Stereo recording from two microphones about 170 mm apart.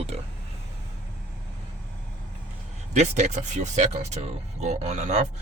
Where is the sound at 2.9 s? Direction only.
40° right (ahead or behind).